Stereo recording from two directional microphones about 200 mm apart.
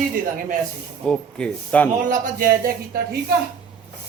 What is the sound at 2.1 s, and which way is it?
Speech, 45° right (ahead or behind).